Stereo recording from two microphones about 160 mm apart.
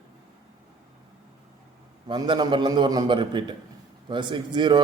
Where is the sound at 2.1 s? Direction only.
30° right (ahead or behind).